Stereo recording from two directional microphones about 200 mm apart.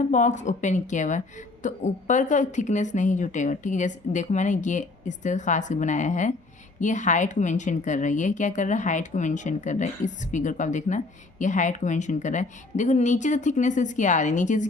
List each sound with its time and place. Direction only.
0.1 s a woman's voice: 40° left (ahead or behind)